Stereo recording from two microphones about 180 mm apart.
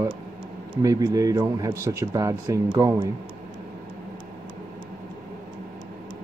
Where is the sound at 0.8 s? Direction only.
20° right (ahead or behind).